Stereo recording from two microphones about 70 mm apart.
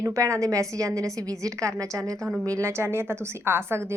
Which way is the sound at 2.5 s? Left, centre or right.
Right.